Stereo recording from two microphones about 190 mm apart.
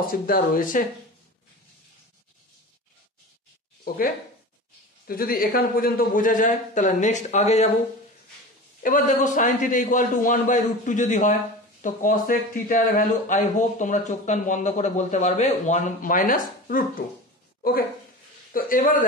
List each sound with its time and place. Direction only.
0.1 s speech: 45° left (ahead or behind)
3.8 s speech: 50° left (ahead or behind)
8.8 s speech: 45° left (ahead or behind)
17.6 s a sound: 50° left (ahead or behind)
18.5 s speech: 45° left (ahead or behind)